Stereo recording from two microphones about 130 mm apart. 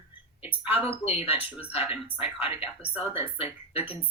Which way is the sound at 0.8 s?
45° left (ahead or behind).